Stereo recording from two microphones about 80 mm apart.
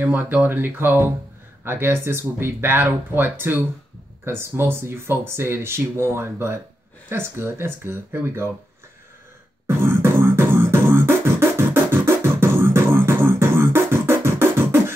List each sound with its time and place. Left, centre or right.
0.0 s speech: right
9.7 s beatboxing: right